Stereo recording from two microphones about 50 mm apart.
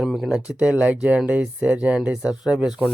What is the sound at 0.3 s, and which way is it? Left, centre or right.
Speech, centre.